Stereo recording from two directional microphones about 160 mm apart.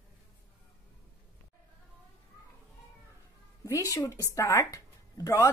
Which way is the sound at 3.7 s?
20° left (ahead or behind).